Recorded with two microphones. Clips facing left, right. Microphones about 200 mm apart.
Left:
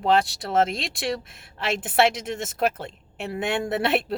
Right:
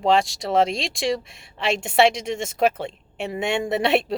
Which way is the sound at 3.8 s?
5° left (ahead or behind).